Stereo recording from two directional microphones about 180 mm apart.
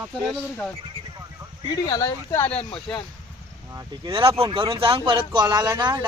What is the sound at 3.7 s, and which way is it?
Speech, 20° right (ahead or behind).